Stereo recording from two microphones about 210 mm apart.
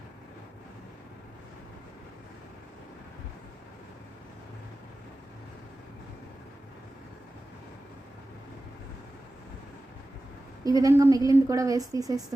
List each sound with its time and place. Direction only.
10.6 s a woman's voice: 15° right (ahead or behind)